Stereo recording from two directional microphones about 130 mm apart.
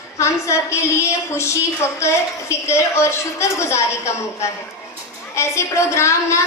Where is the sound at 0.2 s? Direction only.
20° left (ahead or behind).